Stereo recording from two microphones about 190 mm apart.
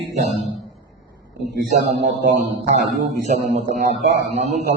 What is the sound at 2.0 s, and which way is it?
Speech, 65° right (ahead or behind).